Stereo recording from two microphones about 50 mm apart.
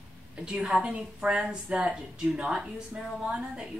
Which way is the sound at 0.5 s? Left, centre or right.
Centre.